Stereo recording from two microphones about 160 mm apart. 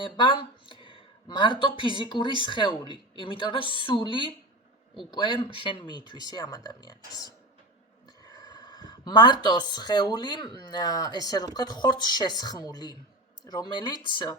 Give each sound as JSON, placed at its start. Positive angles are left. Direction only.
{"t": 0.0, "sound": "a sound", "side_deg": 30}
{"t": 1.8, "sound": "a woman's voice", "side_deg": 30}
{"t": 8.3, "sound": "speech", "side_deg": 25}